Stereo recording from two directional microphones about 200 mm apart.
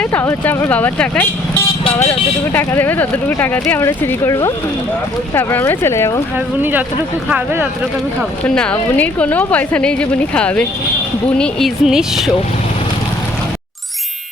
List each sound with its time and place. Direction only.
0.0 s a woman's voice: 10° left (ahead or behind)
1.8 s speech: 30° left (ahead or behind)
2.5 s a woman's voice: 10° left (ahead or behind)
6.3 s speech: 10° right (ahead or behind)
8.4 s a woman's voice: 5° left (ahead or behind)